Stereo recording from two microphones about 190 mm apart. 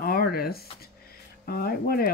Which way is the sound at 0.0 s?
50° left (ahead or behind).